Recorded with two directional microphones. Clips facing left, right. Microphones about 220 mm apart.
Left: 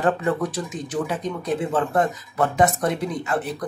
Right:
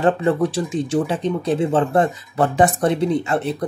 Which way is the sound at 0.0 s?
30° right (ahead or behind).